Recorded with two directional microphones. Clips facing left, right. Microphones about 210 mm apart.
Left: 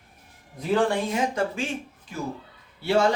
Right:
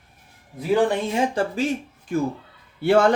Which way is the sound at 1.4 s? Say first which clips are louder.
Right 2 dB; 30° right (ahead or behind).